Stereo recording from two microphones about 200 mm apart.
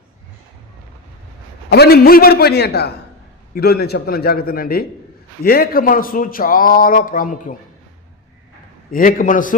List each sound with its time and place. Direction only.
1.7 s a man's voice: 50° left (ahead or behind)
8.9 s a man's voice: 45° left (ahead or behind)